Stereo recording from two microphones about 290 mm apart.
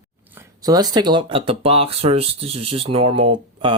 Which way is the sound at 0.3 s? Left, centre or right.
Centre.